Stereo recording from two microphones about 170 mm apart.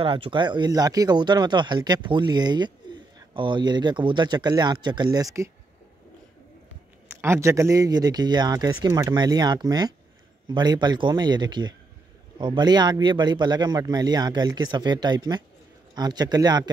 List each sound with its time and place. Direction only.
0.0 s speech: 30° right (ahead or behind)
7.1 s speech: 15° right (ahead or behind)